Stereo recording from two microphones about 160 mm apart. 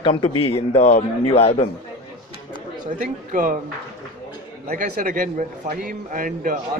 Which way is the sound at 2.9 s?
55° right (ahead or behind).